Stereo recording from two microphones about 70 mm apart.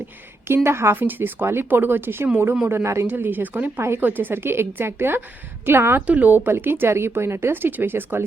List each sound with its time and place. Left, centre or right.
0.4 s speech: right
3.1 s speech: right